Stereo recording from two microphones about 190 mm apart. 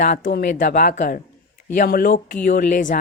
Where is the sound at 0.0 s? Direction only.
45° left (ahead or behind).